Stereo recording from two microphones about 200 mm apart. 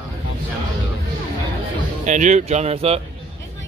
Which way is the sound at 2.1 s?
35° right (ahead or behind).